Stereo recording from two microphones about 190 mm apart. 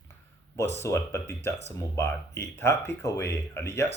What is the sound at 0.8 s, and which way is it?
Speech, 15° left (ahead or behind).